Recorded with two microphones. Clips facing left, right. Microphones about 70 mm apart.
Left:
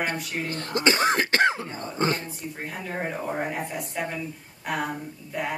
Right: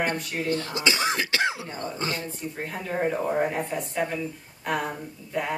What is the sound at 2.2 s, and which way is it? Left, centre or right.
Speech, right.